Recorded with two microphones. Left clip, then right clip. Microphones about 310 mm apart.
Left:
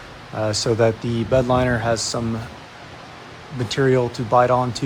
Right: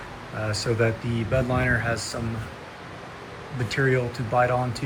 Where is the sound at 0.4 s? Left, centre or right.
Centre.